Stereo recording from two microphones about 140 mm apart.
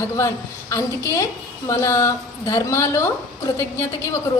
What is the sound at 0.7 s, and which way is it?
A woman's voice, 20° left (ahead or behind).